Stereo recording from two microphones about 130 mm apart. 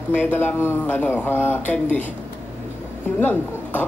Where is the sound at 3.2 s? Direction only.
15° left (ahead or behind).